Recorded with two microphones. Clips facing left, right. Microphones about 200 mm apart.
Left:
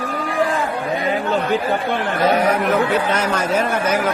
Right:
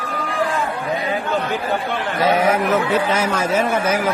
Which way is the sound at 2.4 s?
5° right (ahead or behind).